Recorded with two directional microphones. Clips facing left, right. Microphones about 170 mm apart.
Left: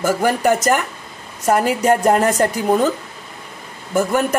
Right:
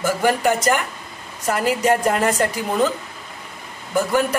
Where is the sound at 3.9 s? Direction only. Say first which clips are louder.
Left 2 dB; 45° left (ahead or behind).